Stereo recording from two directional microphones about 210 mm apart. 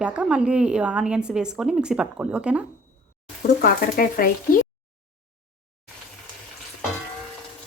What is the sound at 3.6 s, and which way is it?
Speech, 40° left (ahead or behind).